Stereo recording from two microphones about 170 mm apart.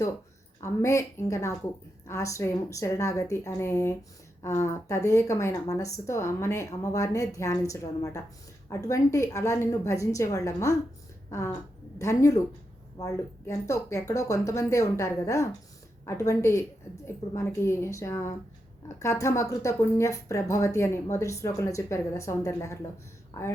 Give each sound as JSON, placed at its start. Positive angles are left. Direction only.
{"t": 0.6, "sound": "a woman's voice", "side_deg": 15}